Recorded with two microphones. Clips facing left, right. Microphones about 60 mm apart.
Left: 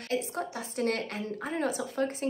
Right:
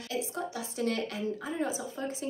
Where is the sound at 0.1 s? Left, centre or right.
Left.